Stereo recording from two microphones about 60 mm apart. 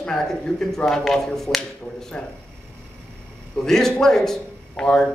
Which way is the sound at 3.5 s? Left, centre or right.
Centre.